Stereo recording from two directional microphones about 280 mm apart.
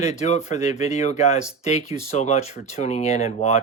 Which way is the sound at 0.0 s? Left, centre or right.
Left.